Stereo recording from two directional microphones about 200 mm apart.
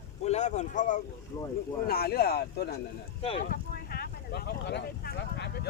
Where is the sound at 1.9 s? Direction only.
50° left (ahead or behind).